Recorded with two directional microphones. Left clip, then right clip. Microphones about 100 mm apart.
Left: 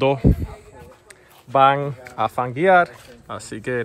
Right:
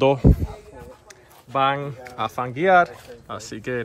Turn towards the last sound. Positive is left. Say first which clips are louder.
# left 3 dB
turn(degrees=-25)  # may be behind; listen again after turning